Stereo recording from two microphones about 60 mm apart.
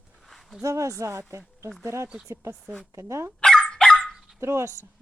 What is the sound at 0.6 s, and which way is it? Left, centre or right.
Speech, right.